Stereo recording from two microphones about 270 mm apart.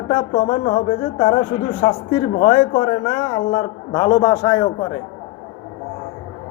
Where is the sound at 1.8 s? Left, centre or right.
Centre.